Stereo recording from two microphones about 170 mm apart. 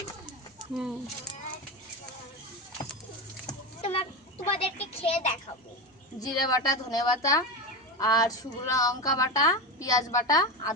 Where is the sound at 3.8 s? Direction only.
35° left (ahead or behind).